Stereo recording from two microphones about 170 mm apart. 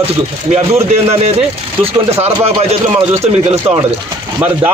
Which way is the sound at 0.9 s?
35° right (ahead or behind).